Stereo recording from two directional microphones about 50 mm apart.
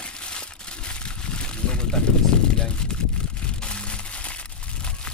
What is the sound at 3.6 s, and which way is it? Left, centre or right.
Crushing, left.